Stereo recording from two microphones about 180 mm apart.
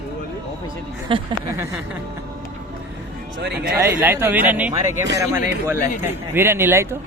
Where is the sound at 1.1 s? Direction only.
30° right (ahead or behind).